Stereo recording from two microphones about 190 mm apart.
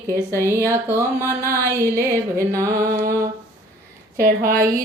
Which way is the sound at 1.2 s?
15° left (ahead or behind).